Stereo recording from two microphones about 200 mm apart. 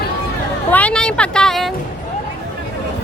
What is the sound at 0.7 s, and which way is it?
Speech, 5° left (ahead or behind).